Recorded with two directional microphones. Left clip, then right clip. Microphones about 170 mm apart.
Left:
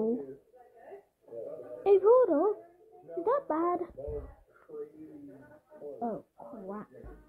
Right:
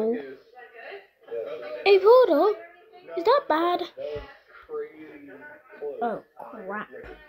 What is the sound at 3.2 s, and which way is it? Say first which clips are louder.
Speech: right 8 dB; 15° right (ahead or behind).